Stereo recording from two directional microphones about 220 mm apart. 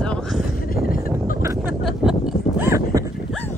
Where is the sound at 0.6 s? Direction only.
40° left (ahead or behind).